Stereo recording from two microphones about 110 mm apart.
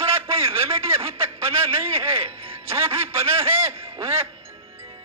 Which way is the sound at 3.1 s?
25° right (ahead or behind).